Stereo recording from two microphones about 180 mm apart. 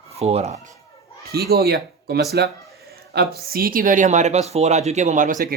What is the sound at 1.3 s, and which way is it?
Speech, 60° right (ahead or behind).